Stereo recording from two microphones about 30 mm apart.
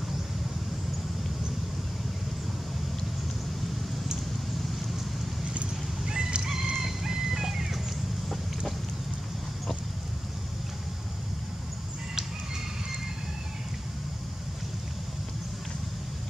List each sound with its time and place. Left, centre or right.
6.0 s fowl: right
6.7 s chicken: centre